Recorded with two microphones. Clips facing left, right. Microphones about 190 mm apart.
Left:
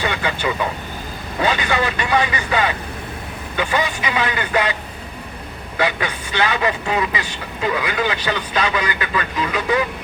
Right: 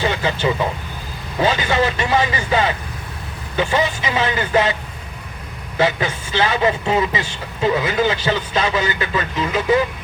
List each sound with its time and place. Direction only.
0.0 s speech: 25° right (ahead or behind)
5.7 s speech: 25° right (ahead or behind)